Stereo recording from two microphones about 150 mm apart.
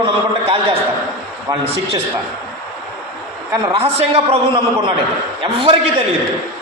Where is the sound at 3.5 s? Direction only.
35° right (ahead or behind).